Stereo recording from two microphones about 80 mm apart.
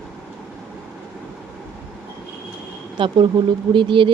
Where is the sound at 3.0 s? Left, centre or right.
Right.